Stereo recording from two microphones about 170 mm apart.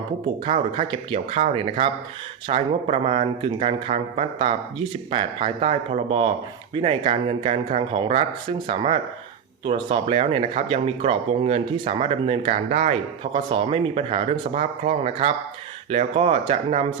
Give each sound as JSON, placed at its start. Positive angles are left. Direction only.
{"t": 0.4, "sound": "speech", "side_deg": -35}